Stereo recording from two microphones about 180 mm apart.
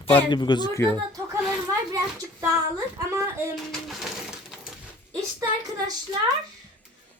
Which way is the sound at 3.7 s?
Centre (ahead or behind).